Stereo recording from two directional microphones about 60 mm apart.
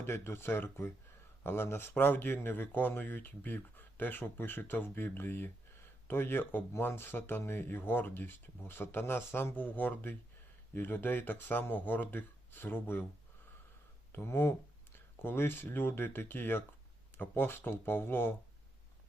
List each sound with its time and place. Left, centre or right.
0.0 s speech: left
14.1 s speech: left